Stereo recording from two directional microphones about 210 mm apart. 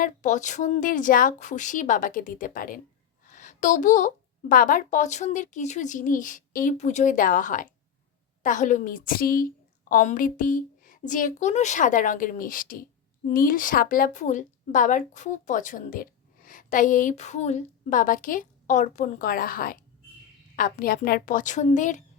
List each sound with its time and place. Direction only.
0.0 s a woman's voice: 35° left (ahead or behind)